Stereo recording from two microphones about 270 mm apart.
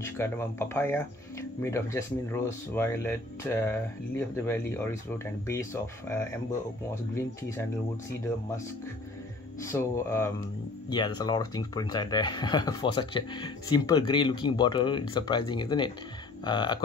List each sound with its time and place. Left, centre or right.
0.0 s speech: centre
9.6 s speech: centre